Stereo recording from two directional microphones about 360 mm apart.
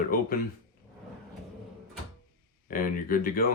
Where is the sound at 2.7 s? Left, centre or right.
Left.